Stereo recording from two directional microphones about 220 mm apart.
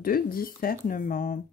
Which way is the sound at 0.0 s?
40° left (ahead or behind).